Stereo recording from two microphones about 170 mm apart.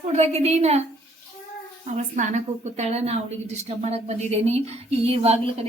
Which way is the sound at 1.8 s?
45° right (ahead or behind).